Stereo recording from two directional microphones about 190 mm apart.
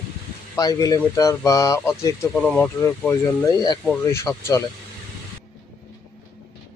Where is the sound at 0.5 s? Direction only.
20° left (ahead or behind).